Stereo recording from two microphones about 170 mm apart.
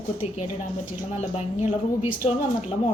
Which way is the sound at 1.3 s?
40° left (ahead or behind).